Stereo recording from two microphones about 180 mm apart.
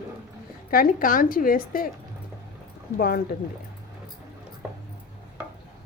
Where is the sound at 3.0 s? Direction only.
60° left (ahead or behind).